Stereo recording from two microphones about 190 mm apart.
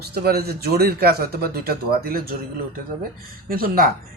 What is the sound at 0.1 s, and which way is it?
A man's voice, 55° right (ahead or behind).